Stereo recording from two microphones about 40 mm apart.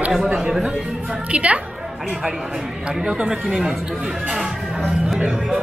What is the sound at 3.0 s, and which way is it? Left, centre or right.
Speech, centre.